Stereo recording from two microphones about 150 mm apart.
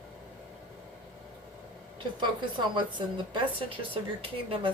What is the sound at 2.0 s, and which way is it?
Speech, 30° right (ahead or behind).